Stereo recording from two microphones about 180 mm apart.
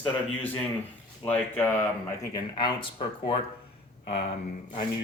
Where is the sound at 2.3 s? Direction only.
25° left (ahead or behind).